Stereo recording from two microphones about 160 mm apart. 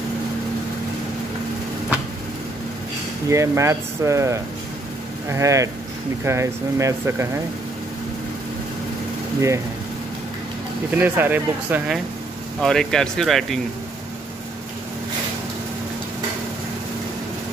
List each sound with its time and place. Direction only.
3.3 s speech: 20° right (ahead or behind)
10.9 s speech: 10° right (ahead or behind)
12.5 s speech: 5° left (ahead or behind)